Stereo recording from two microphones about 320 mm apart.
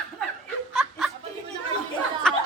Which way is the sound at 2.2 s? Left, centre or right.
Centre.